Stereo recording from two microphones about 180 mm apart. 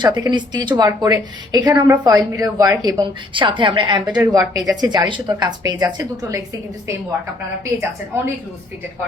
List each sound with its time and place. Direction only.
0.0 s a woman's voice: 25° right (ahead or behind)
4.0 s a woman's voice: 5° right (ahead or behind)
4.6 s a woman's voice: 25° right (ahead or behind)
7.6 s a woman's voice: 15° right (ahead or behind)